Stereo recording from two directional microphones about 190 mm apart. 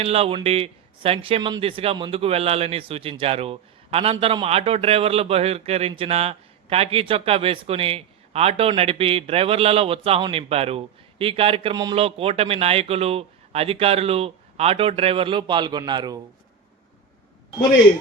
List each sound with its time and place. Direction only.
0.0 s speech: 30° right (ahead or behind)